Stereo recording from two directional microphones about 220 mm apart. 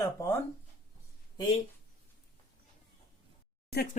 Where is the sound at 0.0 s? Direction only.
15° left (ahead or behind).